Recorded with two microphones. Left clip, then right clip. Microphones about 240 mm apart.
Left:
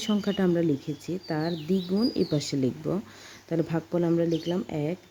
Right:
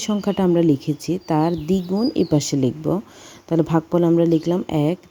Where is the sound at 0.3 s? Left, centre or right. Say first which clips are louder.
Right 9 dB; centre.